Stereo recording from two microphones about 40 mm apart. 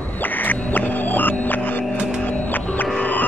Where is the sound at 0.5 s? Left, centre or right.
Left.